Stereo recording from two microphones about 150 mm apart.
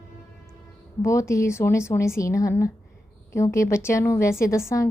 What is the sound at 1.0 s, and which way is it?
A woman's voice, 20° left (ahead or behind).